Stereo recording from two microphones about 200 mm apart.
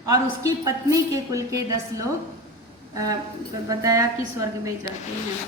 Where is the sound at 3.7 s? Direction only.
15° right (ahead or behind).